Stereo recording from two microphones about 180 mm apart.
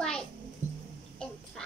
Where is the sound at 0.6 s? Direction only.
40° right (ahead or behind).